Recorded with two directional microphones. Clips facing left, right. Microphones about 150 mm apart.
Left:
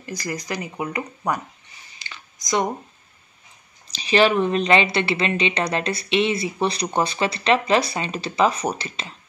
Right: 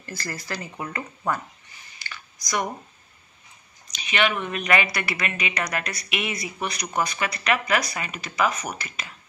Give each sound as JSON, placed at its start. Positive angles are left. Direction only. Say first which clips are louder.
{"t": 0.0, "sound": "speech", "louder": "left 5 dB", "side_deg": 15}
{"t": 2.0, "sound": "computer keyboard", "louder": "right 1 dB", "side_deg": 20}
{"t": 3.8, "sound": "speech", "louder": "left 7 dB", "side_deg": 30}